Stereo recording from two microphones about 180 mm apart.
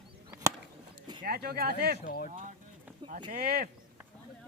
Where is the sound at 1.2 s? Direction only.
60° right (ahead or behind).